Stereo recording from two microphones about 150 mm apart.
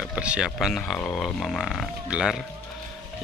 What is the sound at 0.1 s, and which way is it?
Speech, 5° right (ahead or behind).